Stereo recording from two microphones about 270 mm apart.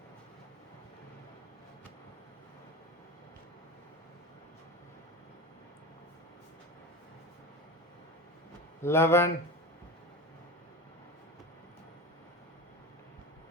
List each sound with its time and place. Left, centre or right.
8.8 s speech: centre